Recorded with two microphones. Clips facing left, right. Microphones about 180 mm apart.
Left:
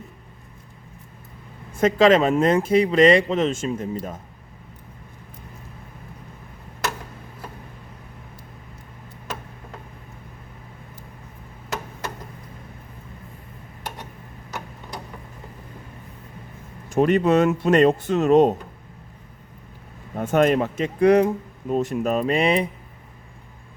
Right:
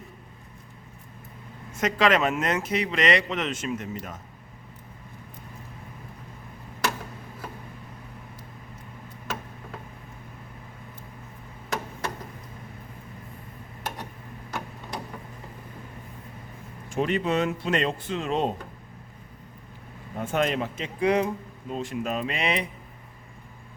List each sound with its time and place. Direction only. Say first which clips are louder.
1.8 s speech: left 7 dB; 25° left (ahead or behind)
16.9 s speech: left 8 dB; 45° left (ahead or behind)
20.1 s speech: left 7 dB; 50° left (ahead or behind)